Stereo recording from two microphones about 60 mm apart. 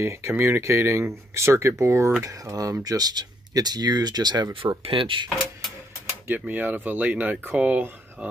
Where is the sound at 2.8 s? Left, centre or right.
Right.